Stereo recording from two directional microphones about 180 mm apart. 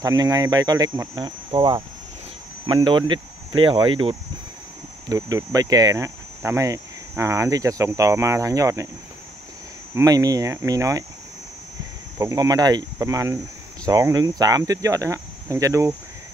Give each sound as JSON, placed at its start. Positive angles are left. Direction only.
{"t": 0.0, "sound": "speech", "side_deg": -20}
{"t": 9.9, "sound": "speech", "side_deg": -20}
{"t": 12.2, "sound": "speech", "side_deg": -20}